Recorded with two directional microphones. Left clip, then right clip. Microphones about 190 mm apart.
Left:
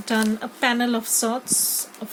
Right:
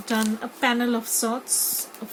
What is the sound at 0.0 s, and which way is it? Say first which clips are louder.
Speech: left 2 dB; 55° left (ahead or behind).